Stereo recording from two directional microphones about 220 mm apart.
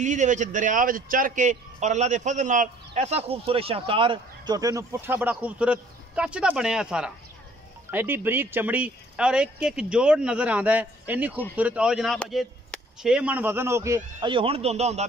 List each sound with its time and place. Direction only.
0.0 s a man's voice: 35° right (ahead or behind)